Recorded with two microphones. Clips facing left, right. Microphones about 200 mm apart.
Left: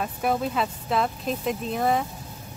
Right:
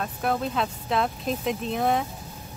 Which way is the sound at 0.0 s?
5° left (ahead or behind).